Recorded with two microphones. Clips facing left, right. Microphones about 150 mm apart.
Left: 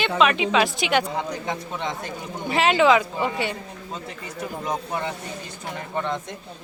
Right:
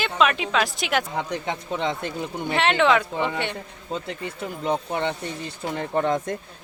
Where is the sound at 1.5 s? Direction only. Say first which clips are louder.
Right 2 dB; 30° right (ahead or behind).